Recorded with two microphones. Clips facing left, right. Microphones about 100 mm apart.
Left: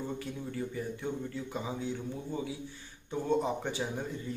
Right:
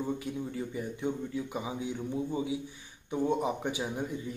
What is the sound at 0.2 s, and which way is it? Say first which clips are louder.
A man's voice: right 2 dB; 15° right (ahead or behind).